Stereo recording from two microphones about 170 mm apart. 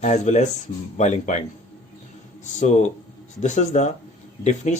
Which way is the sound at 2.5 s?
45° left (ahead or behind).